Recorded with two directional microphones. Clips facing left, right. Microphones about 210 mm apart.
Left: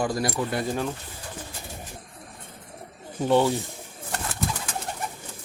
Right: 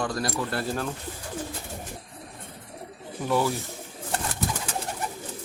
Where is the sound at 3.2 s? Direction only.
25° left (ahead or behind).